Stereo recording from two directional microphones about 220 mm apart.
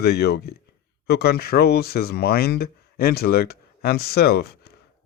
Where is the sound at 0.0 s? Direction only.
45° left (ahead or behind).